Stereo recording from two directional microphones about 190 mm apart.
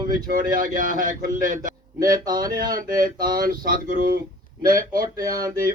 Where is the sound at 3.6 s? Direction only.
45° right (ahead or behind).